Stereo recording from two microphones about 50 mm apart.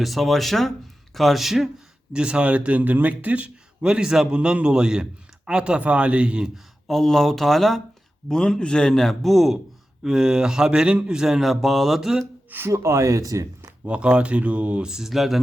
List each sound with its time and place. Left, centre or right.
0.0 s speech: centre
2.1 s speech: centre
3.8 s speech: centre
6.8 s speech: centre
8.3 s a man's voice: centre
10.0 s speech: centre
12.5 s speech: right
12.7 s speech: right
13.8 s speech: right
14.8 s speech: centre